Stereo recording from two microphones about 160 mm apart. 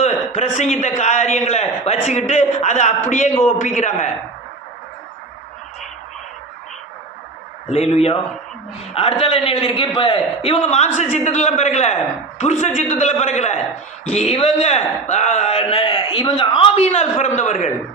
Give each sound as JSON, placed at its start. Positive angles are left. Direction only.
{"t": 0.0, "sound": "a man's voice", "side_deg": 45}
{"t": 7.7, "sound": "a man's voice", "side_deg": 40}